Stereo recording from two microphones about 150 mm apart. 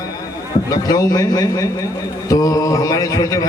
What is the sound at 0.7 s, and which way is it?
A man's voice, 25° left (ahead or behind).